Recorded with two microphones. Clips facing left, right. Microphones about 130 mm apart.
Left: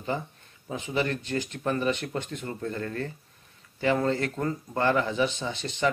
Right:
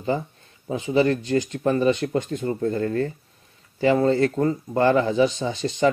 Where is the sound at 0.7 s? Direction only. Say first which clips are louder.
Right 8 dB; 35° right (ahead or behind).